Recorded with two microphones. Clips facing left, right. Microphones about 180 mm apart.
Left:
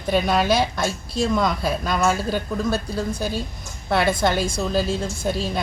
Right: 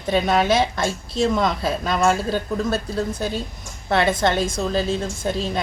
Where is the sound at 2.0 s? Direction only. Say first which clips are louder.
Right 3 dB; centre (ahead or behind).